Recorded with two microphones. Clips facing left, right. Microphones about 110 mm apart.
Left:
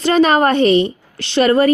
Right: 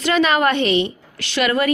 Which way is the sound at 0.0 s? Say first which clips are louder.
Left 4 dB; 35° left (ahead or behind).